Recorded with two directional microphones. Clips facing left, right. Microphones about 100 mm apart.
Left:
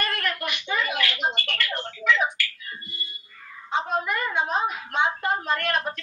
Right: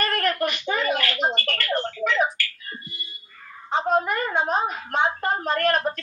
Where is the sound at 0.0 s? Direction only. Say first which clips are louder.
Right 5 dB; 40° right (ahead or behind).